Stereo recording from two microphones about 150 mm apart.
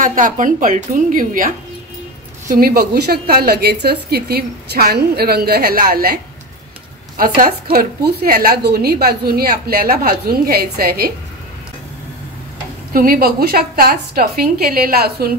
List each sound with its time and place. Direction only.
0.0 s a woman's voice: 60° right (ahead or behind)
2.4 s a woman's voice: 75° right (ahead or behind)
7.2 s a woman's voice: 70° right (ahead or behind)
7.7 s a woman's voice: 90° right
12.9 s a woman's voice: 75° right (ahead or behind); by 15.3 s 90° right